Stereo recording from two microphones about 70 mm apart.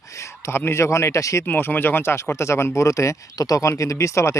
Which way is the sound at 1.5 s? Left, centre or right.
Left.